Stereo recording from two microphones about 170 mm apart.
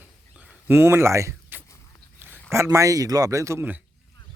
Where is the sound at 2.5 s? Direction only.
15° right (ahead or behind).